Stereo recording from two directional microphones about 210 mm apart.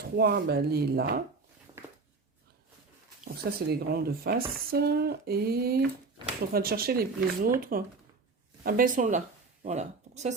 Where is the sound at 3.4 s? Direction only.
50° right (ahead or behind).